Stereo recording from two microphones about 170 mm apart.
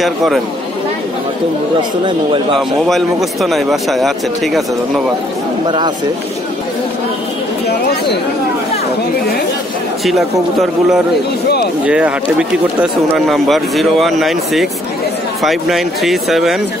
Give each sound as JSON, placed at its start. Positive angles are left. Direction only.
{"t": 0.0, "sound": "speech", "side_deg": 0}
{"t": 1.8, "sound": "speech", "side_deg": -30}
{"t": 2.9, "sound": "speech", "side_deg": 0}
{"t": 7.6, "sound": "chatter", "side_deg": 70}
{"t": 11.8, "sound": "speech", "side_deg": -5}